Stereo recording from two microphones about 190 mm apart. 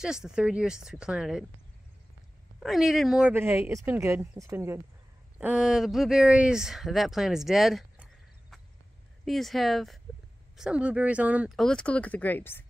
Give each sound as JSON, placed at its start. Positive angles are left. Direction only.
{"t": 0.0, "sound": "speech", "side_deg": -5}
{"t": 2.6, "sound": "speech", "side_deg": 0}